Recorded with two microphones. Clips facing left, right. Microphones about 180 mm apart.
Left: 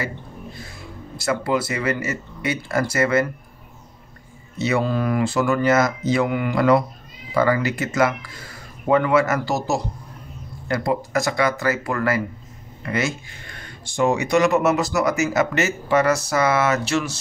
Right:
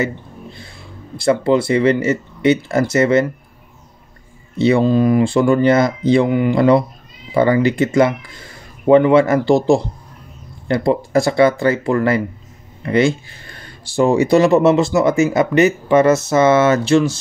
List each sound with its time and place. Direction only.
0.0 s a sound: 25° right (ahead or behind)
1.2 s speech: 25° right (ahead or behind)
4.6 s speech: 30° right (ahead or behind)